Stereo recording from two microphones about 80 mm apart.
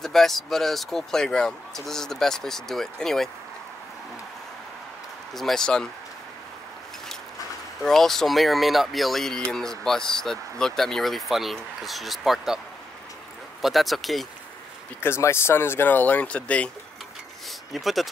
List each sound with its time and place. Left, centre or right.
0.0 s speech: centre
5.3 s speech: centre
7.8 s speech: centre
13.6 s speech: centre
15.0 s speech: left; by 16.7 s centre
17.7 s speech: centre